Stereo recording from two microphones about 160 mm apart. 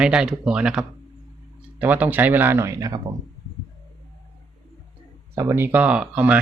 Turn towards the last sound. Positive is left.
turn(degrees=-10)  # may be behind; listen again after turning